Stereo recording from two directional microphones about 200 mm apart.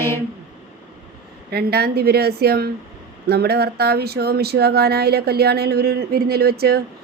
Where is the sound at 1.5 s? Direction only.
50° right (ahead or behind).